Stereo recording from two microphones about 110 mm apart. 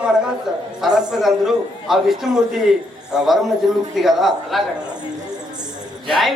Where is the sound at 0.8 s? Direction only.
5° right (ahead or behind).